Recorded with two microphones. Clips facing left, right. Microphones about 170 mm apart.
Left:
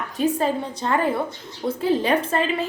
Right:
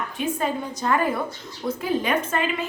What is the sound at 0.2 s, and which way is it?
A woman's voice, 35° left (ahead or behind).